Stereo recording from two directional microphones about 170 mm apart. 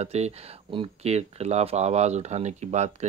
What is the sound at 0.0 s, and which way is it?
Speech, 40° right (ahead or behind).